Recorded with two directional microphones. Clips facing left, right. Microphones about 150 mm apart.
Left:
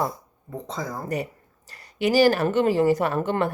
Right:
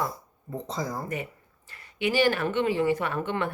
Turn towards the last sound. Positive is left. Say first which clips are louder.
# left 5 dB
turn(degrees=40)  # may be behind; listen again after turning